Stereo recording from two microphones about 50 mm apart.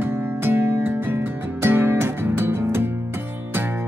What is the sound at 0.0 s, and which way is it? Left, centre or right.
Music, right.